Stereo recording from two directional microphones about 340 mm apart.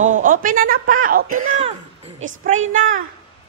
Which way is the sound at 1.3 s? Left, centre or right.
Right.